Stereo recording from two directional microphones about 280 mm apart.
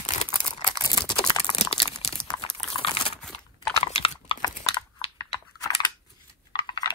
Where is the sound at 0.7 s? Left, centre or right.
Centre.